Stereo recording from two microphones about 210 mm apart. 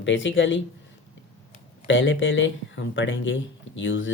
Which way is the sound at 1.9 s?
60° left (ahead or behind).